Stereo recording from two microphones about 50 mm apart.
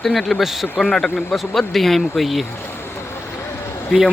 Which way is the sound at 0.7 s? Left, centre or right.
Centre.